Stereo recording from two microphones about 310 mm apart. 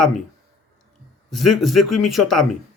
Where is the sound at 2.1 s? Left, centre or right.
Centre.